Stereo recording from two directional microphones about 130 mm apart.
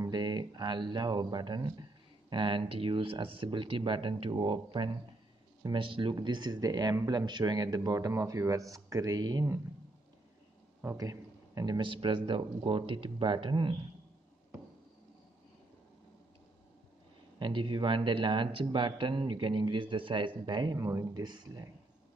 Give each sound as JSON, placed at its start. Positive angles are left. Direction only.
{"t": 0.0, "sound": "speech", "side_deg": -35}
{"t": 10.8, "sound": "speech", "side_deg": -25}
{"t": 17.4, "sound": "speech", "side_deg": -40}